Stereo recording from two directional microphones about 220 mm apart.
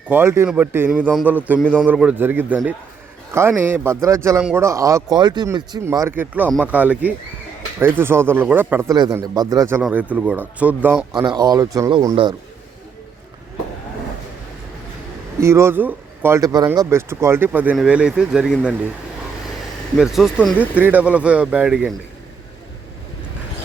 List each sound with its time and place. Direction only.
0.1 s a man's voice: 10° right (ahead or behind)
1.6 s speech: 5° left (ahead or behind)
1.9 s a man's voice: 5° right (ahead or behind)
11.1 s speech: 20° right (ahead or behind)
15.4 s a man's voice: 10° right (ahead or behind)
20.0 s speech: centre (ahead or behind)